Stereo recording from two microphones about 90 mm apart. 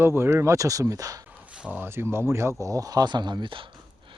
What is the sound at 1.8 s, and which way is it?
Speech, 25° right (ahead or behind).